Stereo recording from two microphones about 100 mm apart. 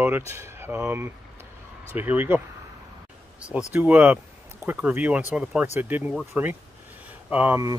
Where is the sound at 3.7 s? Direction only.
20° right (ahead or behind).